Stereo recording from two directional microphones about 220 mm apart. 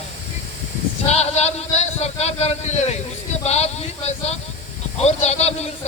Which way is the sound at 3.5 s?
30° left (ahead or behind).